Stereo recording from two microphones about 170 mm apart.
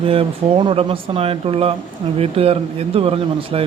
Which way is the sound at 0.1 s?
30° right (ahead or behind).